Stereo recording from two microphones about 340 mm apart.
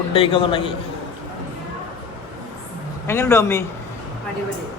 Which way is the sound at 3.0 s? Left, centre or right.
Centre.